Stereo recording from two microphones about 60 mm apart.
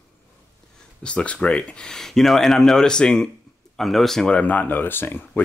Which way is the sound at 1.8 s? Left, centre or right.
Centre.